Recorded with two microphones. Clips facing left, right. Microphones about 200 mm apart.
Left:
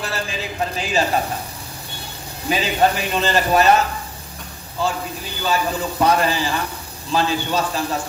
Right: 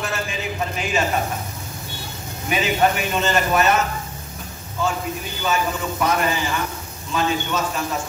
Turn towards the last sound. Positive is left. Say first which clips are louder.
# left 2 dB
turn(degrees=35)  # may be behind; listen again after turning